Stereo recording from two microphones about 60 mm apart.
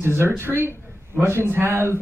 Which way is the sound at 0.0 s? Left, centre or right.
Right.